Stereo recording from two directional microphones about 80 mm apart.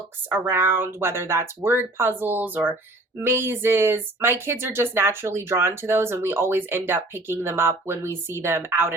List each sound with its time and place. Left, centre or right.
0.4 s speech: right